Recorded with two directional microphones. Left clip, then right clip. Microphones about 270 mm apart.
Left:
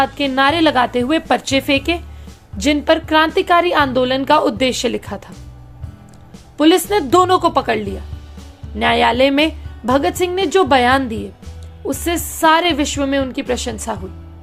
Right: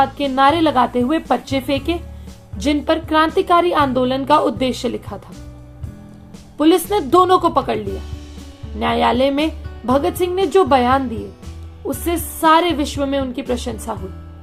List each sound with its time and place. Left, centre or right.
0.3 s a woman's voice: left
6.6 s a woman's voice: left